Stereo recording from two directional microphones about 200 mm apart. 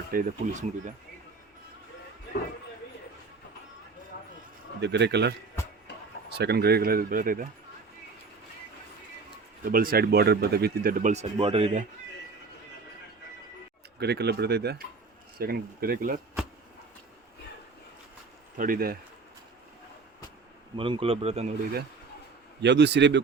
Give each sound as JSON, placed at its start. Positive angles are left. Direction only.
{"t": 0.1, "sound": "speech", "side_deg": -40}
{"t": 4.8, "sound": "speech", "side_deg": -60}
{"t": 6.3, "sound": "speech", "side_deg": -55}
{"t": 9.6, "sound": "speech", "side_deg": -45}
{"t": 14.0, "sound": "speech", "side_deg": -55}
{"t": 18.5, "sound": "speech", "side_deg": -45}
{"t": 20.7, "sound": "speech", "side_deg": -25}
{"t": 22.6, "sound": "speech", "side_deg": -60}